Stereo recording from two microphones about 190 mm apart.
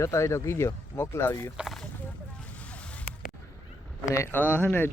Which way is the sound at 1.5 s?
Centre (ahead or behind).